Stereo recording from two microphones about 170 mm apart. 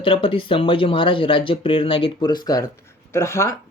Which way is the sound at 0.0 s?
30° left (ahead or behind).